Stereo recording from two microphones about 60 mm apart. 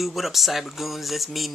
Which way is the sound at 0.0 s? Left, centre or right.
Centre.